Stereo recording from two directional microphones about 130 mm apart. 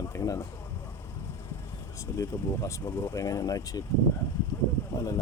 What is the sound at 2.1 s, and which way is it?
Speech, 25° left (ahead or behind).